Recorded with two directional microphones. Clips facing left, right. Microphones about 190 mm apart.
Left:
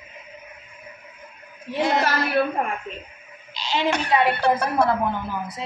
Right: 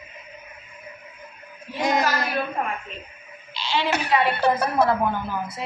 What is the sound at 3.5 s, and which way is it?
Speech, 45° left (ahead or behind).